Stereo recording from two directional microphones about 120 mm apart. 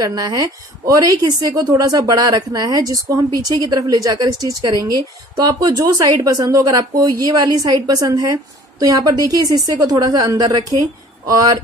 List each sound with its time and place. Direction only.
0.0 s a woman's voice: 35° right (ahead or behind)